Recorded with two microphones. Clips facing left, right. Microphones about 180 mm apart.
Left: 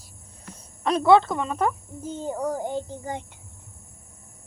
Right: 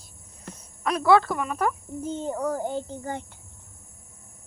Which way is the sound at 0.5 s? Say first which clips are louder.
Left 3 dB; 30° left (ahead or behind).